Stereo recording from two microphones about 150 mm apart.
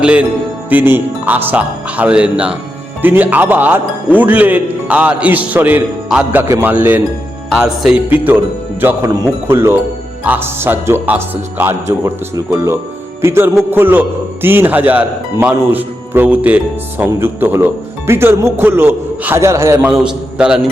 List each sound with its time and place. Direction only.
0.0 s a man's voice: 10° right (ahead or behind)
19.9 s a man's voice: 5° right (ahead or behind)